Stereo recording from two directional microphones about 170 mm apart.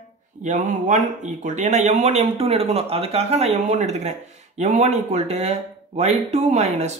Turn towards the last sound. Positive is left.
turn(degrees=-40)  # may be behind; listen again after turning